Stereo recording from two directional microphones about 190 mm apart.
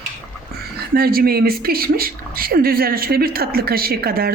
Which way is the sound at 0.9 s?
50° right (ahead or behind).